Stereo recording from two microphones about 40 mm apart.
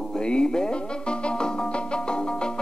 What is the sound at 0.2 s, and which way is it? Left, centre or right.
Music, left.